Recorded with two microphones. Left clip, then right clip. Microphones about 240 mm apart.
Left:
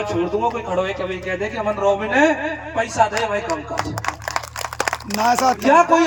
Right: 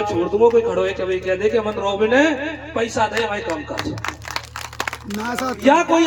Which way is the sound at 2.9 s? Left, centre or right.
Centre.